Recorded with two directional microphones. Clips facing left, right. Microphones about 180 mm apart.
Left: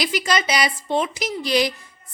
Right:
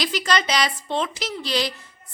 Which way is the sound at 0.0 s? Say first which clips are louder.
Left 1 dB; 10° left (ahead or behind).